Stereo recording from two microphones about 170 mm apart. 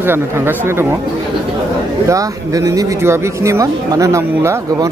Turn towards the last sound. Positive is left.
turn(degrees=-15)  # may be behind; listen again after turning